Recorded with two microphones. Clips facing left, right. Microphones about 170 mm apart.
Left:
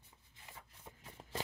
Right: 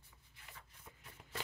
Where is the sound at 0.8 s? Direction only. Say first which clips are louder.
Left 6 dB; 35° left (ahead or behind).